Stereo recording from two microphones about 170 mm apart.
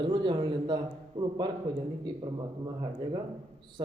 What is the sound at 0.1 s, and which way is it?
A man's voice, 30° right (ahead or behind).